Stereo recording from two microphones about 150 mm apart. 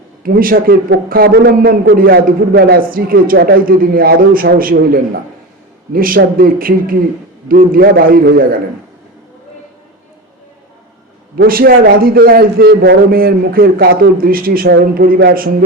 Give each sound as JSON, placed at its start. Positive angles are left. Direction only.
{"t": 0.2, "sound": "a man's voice", "side_deg": -70}
{"t": 11.3, "sound": "a man's voice", "side_deg": -75}